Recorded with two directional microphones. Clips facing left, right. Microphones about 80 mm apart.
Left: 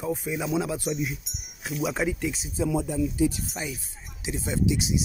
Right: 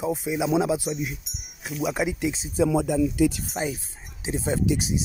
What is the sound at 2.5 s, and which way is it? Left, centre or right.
Speech, right.